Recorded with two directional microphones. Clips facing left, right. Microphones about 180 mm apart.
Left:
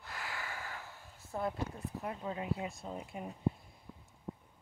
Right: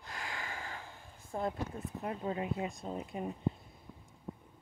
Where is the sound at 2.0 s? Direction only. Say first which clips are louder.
Right 4 dB; 25° right (ahead or behind).